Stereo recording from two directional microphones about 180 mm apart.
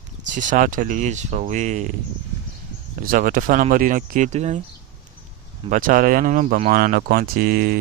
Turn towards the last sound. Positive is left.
turn(degrees=-60)  # may be behind; listen again after turning